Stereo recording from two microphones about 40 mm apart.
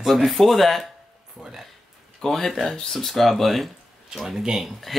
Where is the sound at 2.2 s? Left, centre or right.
Centre.